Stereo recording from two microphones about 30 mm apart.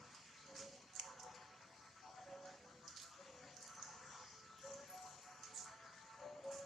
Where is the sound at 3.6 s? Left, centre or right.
Centre.